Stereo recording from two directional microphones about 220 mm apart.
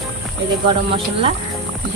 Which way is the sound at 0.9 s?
25° right (ahead or behind).